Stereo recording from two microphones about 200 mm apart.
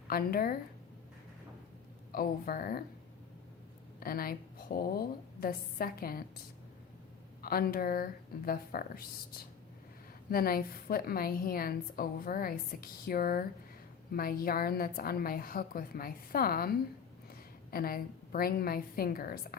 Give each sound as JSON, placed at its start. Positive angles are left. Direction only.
{"t": 0.1, "sound": "a woman's voice", "side_deg": 50}
{"t": 2.1, "sound": "a woman's voice", "side_deg": 45}
{"t": 4.0, "sound": "a woman's voice", "side_deg": 45}
{"t": 7.4, "sound": "a woman's voice", "side_deg": 50}
{"t": 10.2, "sound": "a woman's voice", "side_deg": 50}